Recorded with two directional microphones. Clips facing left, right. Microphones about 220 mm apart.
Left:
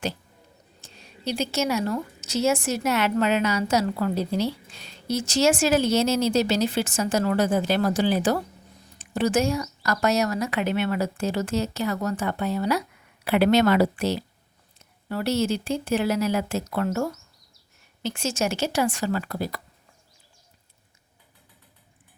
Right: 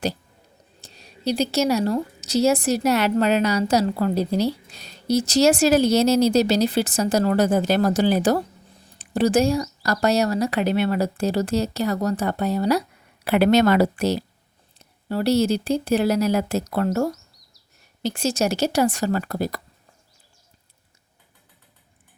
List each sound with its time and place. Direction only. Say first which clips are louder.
0.8 s a woman's voice: right 5 dB; 35° right (ahead or behind)